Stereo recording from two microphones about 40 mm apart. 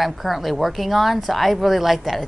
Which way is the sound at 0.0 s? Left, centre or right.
Centre.